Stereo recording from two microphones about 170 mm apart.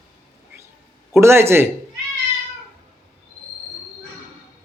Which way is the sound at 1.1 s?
15° right (ahead or behind).